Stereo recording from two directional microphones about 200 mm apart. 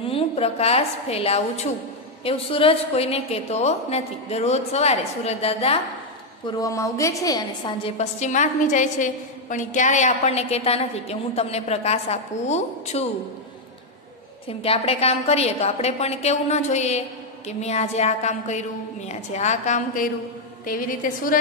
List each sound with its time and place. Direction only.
0.0 s a woman's voice: 30° left (ahead or behind)
6.4 s a woman's voice: 15° left (ahead or behind); by 13.1 s 35° left (ahead or behind)
14.5 s a woman's voice: 30° left (ahead or behind)